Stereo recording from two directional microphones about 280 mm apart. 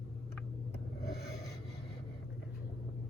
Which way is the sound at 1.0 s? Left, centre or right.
Left.